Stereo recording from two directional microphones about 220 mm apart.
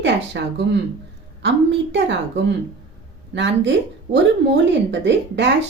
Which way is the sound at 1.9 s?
55° right (ahead or behind).